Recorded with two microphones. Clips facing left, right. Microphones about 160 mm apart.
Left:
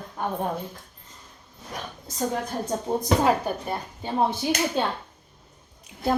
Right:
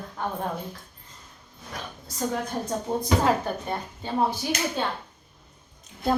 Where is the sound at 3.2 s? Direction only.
15° left (ahead or behind).